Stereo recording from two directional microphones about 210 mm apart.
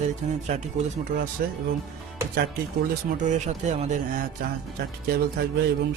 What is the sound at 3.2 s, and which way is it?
Speech, 35° right (ahead or behind).